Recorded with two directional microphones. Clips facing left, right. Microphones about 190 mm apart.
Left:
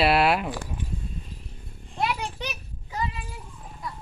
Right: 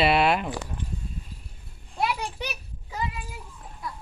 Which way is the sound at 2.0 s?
10° right (ahead or behind).